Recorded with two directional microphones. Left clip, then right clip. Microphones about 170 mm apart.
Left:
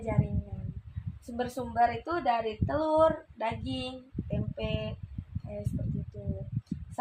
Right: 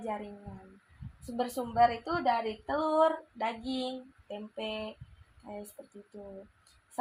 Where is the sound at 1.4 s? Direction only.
25° right (ahead or behind).